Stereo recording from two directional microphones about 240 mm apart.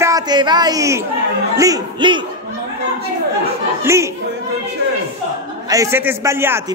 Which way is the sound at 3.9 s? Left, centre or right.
Centre.